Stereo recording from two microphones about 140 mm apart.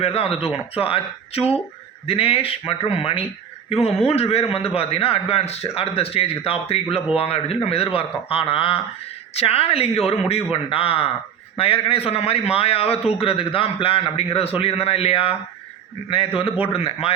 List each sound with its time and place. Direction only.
0.0 s a man's voice: 45° left (ahead or behind)